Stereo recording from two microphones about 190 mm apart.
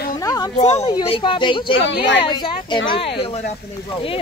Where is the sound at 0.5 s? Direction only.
35° left (ahead or behind).